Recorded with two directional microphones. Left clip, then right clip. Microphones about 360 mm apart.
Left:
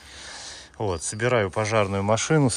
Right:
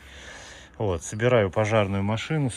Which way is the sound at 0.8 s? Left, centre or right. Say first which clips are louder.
Right 1 dB; centre.